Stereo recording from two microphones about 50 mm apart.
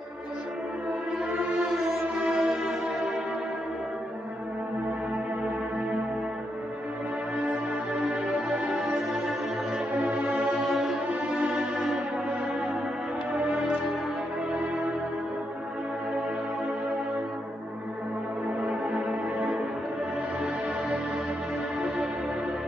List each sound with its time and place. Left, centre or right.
1.6 s music: centre
9.9 s music: right
10.7 s music: centre
11.1 s music: right
11.4 s music: centre
13.3 s music: right
18.6 s music: centre